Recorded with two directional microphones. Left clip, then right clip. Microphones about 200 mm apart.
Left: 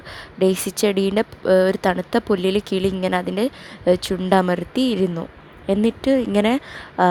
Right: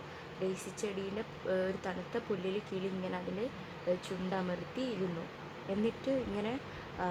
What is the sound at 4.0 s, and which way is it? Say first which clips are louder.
A woman's voice: left 19 dB; 45° left (ahead or behind).